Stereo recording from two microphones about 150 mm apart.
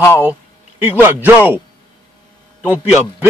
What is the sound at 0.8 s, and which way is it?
Speech, 15° right (ahead or behind).